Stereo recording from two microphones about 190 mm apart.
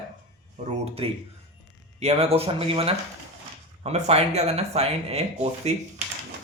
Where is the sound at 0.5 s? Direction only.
30° right (ahead or behind).